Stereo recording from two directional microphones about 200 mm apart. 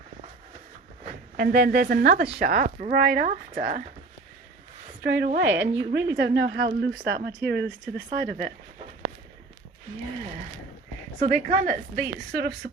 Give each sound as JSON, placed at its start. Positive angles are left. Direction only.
{"t": 1.4, "sound": "a woman's voice", "side_deg": -50}
{"t": 5.0, "sound": "speech", "side_deg": -55}
{"t": 5.6, "sound": "a woman's voice", "side_deg": -30}
{"t": 6.1, "sound": "speech", "side_deg": -60}
{"t": 11.2, "sound": "a woman's voice", "side_deg": -35}